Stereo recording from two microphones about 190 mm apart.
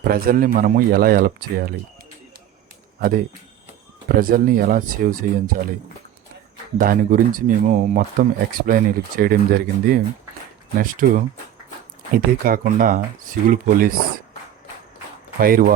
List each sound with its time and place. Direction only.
0.0 s speech: 50° right (ahead or behind)
4.1 s speech: 50° right (ahead or behind)
6.7 s speech: 50° right (ahead or behind)
12.1 s speech: 50° right (ahead or behind)
15.4 s speech: 50° right (ahead or behind)